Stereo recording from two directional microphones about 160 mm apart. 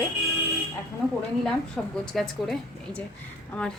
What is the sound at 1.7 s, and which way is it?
A woman's voice, 5° left (ahead or behind).